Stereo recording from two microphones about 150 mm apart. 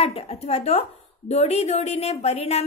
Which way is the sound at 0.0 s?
40° left (ahead or behind).